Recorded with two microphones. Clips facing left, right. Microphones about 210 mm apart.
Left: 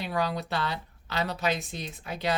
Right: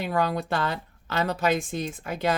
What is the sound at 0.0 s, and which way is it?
Speech, 50° right (ahead or behind).